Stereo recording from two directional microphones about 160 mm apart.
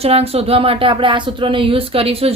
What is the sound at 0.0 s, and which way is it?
Speech, 40° right (ahead or behind).